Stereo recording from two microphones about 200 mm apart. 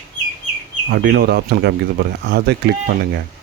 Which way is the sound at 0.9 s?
55° right (ahead or behind).